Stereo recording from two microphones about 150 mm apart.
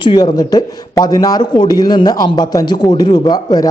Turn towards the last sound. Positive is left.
turn(degrees=25)  # may be behind; listen again after turning